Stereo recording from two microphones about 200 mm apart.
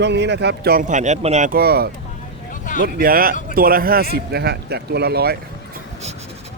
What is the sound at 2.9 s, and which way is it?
Speech, 45° right (ahead or behind).